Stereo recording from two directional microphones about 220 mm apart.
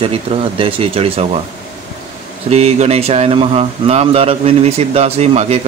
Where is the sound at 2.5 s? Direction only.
30° right (ahead or behind).